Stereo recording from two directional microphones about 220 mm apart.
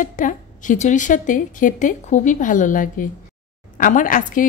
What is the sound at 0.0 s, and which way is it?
A woman's voice, 35° left (ahead or behind).